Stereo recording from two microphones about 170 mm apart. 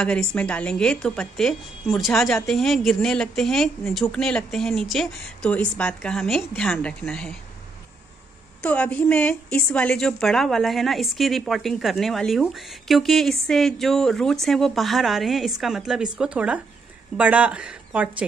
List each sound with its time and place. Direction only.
0.0 s a woman's voice: 5° left (ahead or behind)
8.6 s a woman's voice: 10° left (ahead or behind)